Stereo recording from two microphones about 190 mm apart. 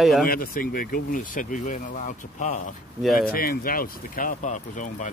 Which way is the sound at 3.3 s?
50° left (ahead or behind).